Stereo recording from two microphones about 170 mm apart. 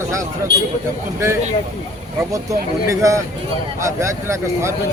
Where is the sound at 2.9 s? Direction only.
20° right (ahead or behind).